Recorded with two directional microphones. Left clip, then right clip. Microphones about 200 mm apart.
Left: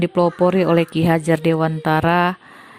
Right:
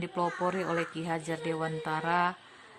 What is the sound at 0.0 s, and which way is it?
A woman's voice, 40° left (ahead or behind).